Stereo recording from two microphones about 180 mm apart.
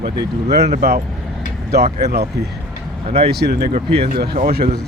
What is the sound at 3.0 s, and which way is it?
Speech, 35° right (ahead or behind).